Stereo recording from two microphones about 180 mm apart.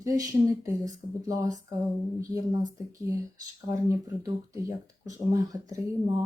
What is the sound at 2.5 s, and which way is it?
Speech, 20° right (ahead or behind).